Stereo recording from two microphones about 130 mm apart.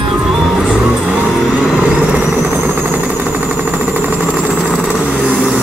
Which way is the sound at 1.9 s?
10° right (ahead or behind).